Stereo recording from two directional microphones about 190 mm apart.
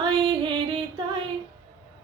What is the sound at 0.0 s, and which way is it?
Music, 25° right (ahead or behind).